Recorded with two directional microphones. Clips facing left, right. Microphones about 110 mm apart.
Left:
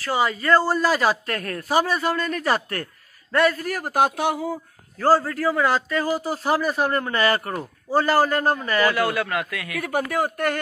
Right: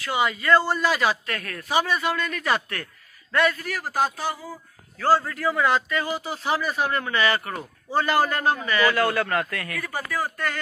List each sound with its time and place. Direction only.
0.0 s a man's voice: 35° left (ahead or behind); by 4.6 s 65° left (ahead or behind)
5.0 s speech: 40° left (ahead or behind)
8.9 s a man's voice: 15° left (ahead or behind)
9.8 s a man's voice: 65° left (ahead or behind)